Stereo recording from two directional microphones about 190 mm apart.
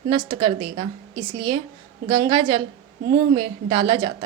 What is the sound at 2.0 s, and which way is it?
A woman's voice, 25° right (ahead or behind).